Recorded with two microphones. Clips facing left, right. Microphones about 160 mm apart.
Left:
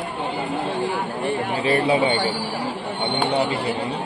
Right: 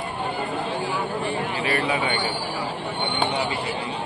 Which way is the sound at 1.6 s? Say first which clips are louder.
Left 7 dB; 30° left (ahead or behind).